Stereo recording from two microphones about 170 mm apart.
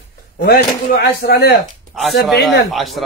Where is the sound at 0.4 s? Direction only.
70° left (ahead or behind).